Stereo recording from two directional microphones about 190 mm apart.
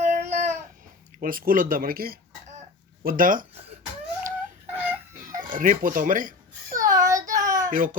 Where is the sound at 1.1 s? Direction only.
50° right (ahead or behind).